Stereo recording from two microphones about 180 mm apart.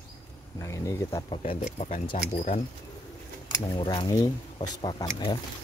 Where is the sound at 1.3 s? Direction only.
30° left (ahead or behind).